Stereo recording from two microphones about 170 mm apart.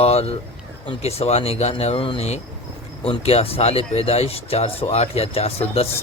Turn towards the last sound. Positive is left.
turn(degrees=35)  # may be behind; listen again after turning